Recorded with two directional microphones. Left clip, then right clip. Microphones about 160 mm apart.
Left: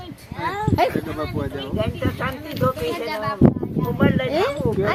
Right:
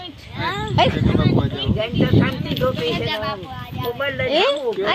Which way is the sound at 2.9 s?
5° right (ahead or behind).